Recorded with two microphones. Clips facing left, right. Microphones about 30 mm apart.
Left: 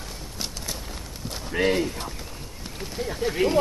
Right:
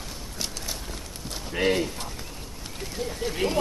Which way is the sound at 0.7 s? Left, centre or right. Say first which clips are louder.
Left 1 dB; centre.